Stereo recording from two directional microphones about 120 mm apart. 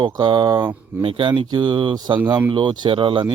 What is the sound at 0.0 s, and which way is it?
Speech, 40° right (ahead or behind).